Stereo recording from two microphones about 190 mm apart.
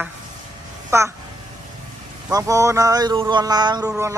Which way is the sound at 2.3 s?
15° right (ahead or behind).